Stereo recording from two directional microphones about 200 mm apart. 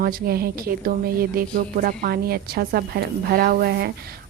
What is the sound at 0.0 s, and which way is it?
A woman's voice, 45° right (ahead or behind).